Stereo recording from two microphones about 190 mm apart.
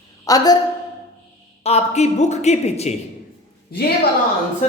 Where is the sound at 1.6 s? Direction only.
35° left (ahead or behind).